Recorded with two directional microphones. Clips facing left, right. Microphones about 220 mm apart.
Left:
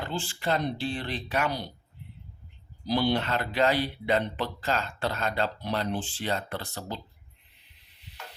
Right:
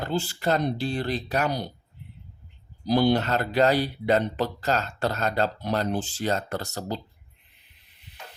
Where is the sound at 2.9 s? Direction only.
45° right (ahead or behind).